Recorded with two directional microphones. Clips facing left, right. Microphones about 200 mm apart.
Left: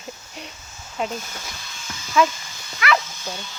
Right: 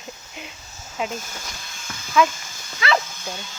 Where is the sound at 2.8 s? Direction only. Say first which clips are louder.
Even; 25° right (ahead or behind).